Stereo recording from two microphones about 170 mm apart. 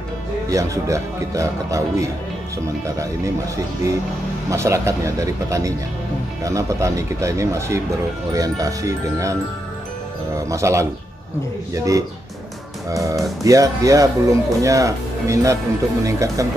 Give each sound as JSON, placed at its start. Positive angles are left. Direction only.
{"t": 0.5, "sound": "speech", "side_deg": -20}
{"t": 4.5, "sound": "speech", "side_deg": -15}